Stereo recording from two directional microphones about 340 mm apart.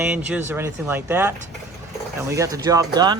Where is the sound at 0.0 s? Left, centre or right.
Centre.